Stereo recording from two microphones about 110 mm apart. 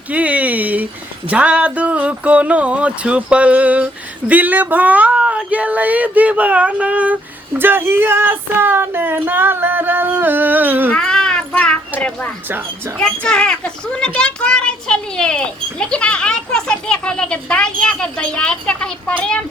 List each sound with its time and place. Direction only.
0.1 s a sound: 15° right (ahead or behind)
1.3 s speech: 10° right (ahead or behind)
10.9 s a sound: 5° left (ahead or behind)
11.5 s a child's voice: 10° left (ahead or behind)
12.5 s speech: 20° right (ahead or behind)
13.0 s a child's voice: 5° left (ahead or behind)